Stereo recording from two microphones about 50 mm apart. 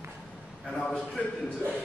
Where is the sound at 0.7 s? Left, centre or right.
Centre.